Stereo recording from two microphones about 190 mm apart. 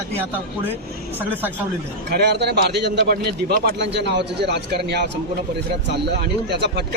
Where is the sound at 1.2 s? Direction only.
10° right (ahead or behind).